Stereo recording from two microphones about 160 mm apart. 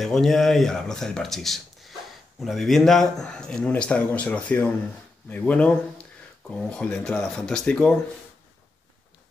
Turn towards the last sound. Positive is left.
turn(degrees=5)  # may be behind; listen again after turning